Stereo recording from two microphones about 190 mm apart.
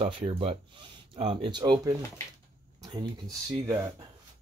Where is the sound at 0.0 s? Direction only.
30° right (ahead or behind).